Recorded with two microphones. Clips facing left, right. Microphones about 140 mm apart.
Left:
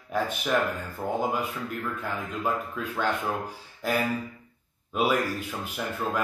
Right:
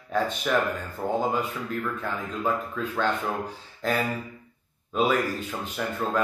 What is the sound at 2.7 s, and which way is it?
Speech, 10° left (ahead or behind).